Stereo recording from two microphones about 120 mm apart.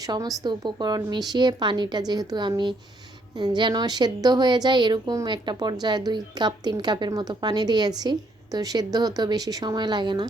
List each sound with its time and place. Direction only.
0.0 s a woman's voice: 30° right (ahead or behind)